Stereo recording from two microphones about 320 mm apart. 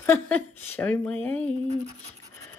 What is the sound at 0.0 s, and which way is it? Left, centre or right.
A woman's voice, centre.